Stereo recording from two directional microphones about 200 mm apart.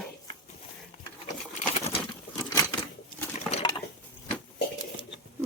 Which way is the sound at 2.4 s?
15° left (ahead or behind).